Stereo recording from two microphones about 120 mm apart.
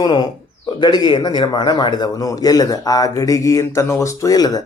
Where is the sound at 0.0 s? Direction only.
35° left (ahead or behind).